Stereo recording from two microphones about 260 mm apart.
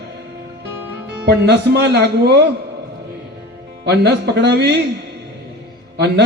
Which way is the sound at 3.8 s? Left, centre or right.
Right.